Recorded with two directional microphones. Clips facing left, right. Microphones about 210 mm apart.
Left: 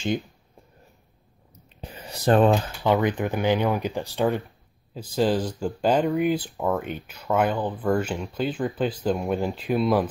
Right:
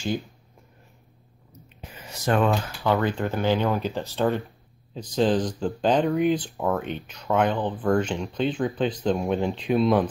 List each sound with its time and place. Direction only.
1.8 s computer keyboard: 35° left (ahead or behind)
2.8 s speech: 15° left (ahead or behind)
7.5 s speech: 20° right (ahead or behind)
7.8 s speech: 5° left (ahead or behind)